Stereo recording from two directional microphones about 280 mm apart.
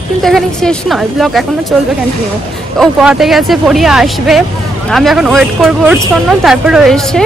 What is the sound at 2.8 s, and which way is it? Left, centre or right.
A woman's voice, centre.